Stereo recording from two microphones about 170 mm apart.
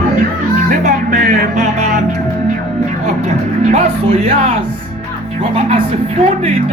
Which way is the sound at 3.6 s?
40° right (ahead or behind).